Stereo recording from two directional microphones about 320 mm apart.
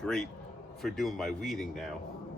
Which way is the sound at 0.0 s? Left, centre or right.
Centre.